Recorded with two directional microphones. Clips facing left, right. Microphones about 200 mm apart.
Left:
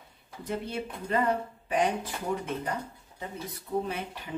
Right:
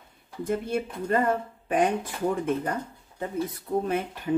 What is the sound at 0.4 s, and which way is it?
Speech, 50° right (ahead or behind).